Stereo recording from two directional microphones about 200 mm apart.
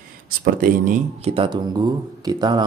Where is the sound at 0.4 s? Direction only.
45° right (ahead or behind).